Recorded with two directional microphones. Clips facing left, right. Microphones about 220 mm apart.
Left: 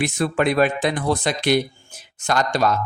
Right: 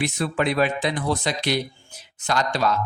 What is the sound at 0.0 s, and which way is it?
A man's voice, 50° left (ahead or behind).